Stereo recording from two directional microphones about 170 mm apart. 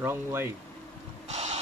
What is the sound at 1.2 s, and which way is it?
Boat, 40° right (ahead or behind).